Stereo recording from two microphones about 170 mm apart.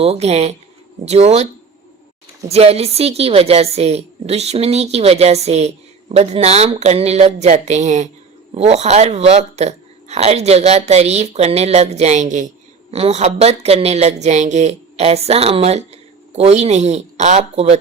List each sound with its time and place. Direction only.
0.0 s a woman's voice: 40° right (ahead or behind)
2.5 s a woman's voice: 35° right (ahead or behind)